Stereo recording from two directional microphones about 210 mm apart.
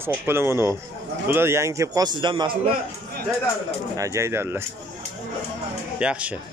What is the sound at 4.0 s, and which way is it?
Speech, 15° right (ahead or behind).